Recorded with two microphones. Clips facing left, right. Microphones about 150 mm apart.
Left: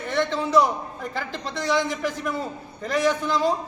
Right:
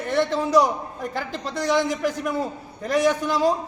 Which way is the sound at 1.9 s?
45° right (ahead or behind).